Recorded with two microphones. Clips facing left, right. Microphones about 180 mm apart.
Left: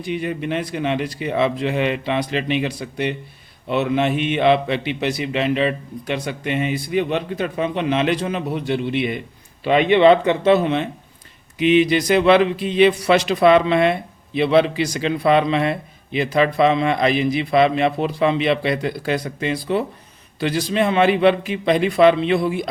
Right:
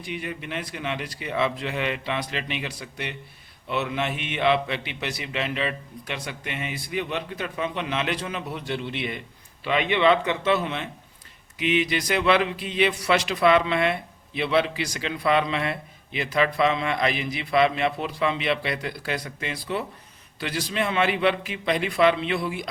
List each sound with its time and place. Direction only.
0.0 s speech: 30° left (ahead or behind)
9.6 s speech: 30° left (ahead or behind)